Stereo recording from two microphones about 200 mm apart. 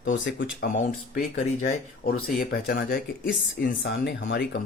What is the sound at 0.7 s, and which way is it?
Speech, 40° left (ahead or behind).